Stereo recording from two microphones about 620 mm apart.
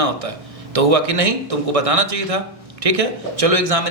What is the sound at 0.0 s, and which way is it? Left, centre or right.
Speech, right.